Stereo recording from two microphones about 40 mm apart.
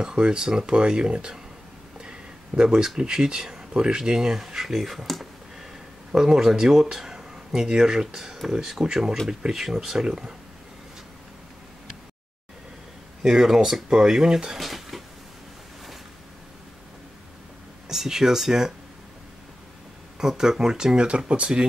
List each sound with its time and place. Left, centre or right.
0.0 s speech: right
2.0 s a sound: centre
3.0 s speech: centre
3.7 s speech: right
4.0 s speech: centre
10.0 s speech: right
13.2 s speech: centre
17.8 s speech: centre
20.2 s speech: centre